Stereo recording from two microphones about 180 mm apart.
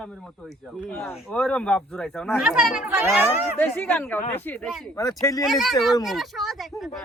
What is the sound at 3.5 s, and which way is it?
Speech, 10° left (ahead or behind).